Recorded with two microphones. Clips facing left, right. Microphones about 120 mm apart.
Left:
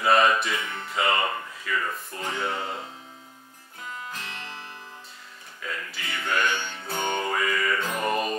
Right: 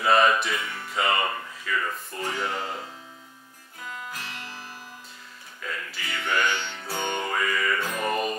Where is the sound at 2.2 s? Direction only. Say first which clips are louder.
Even; 15° left (ahead or behind).